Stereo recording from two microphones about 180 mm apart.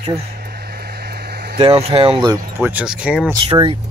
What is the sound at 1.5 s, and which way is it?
Speech, 35° right (ahead or behind).